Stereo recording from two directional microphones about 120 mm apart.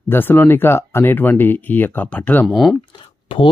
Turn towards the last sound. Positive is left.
turn(degrees=45)  # may be behind; listen again after turning